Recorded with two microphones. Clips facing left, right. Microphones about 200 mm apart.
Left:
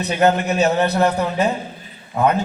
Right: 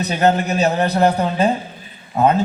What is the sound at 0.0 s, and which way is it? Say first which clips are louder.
A man's voice: even; 35° right (ahead or behind).